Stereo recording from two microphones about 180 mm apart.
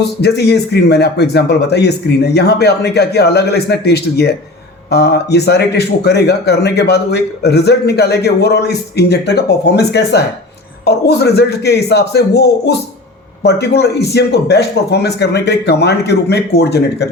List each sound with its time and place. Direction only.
0.2 s a man's voice: 65° left (ahead or behind)